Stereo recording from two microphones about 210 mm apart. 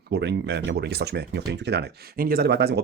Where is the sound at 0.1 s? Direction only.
55° right (ahead or behind).